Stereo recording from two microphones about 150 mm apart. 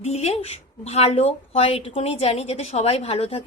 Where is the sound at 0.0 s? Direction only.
45° left (ahead or behind).